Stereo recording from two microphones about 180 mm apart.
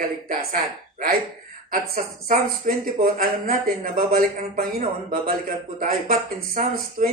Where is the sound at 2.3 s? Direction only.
50° right (ahead or behind).